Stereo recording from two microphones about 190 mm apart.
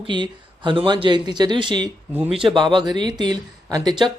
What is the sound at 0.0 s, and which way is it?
Speech, 25° right (ahead or behind).